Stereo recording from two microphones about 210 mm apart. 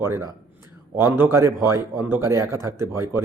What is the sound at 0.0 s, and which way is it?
A man's voice, 10° right (ahead or behind).